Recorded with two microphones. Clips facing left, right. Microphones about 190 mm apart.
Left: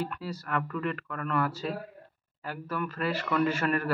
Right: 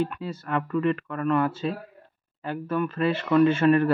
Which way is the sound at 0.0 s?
20° right (ahead or behind).